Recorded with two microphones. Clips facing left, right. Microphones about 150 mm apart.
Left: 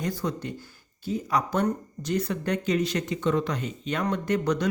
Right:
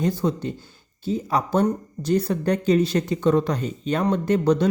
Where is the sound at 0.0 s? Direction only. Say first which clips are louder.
Right 7 dB; 25° right (ahead or behind).